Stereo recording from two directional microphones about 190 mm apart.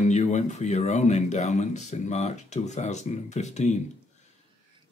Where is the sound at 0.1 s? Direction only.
40° left (ahead or behind).